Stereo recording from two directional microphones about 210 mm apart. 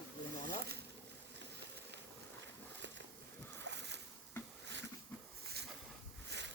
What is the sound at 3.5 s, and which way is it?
Boat, 55° right (ahead or behind).